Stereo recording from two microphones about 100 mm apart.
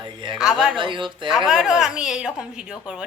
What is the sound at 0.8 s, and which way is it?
Speech, 55° right (ahead or behind).